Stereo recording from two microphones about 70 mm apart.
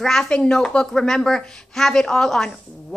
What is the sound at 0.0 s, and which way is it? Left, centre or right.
A woman's voice, centre.